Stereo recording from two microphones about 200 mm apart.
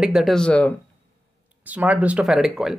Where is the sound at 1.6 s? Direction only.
5° right (ahead or behind).